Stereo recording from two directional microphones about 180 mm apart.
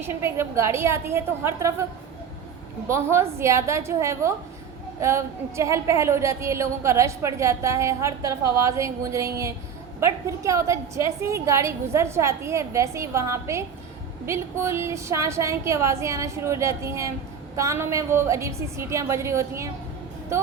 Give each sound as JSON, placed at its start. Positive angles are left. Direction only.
{"t": 0.0, "sound": "a woman's voice", "side_deg": -15}